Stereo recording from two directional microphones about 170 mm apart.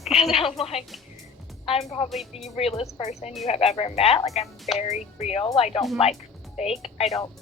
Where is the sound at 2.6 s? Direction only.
35° left (ahead or behind).